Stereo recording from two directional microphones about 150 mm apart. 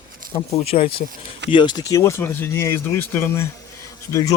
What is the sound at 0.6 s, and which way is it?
Speech, 45° left (ahead or behind).